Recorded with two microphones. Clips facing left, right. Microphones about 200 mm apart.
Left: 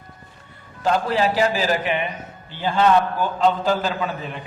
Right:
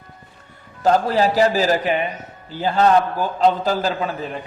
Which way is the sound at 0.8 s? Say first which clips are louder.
Right 3 dB; 40° right (ahead or behind).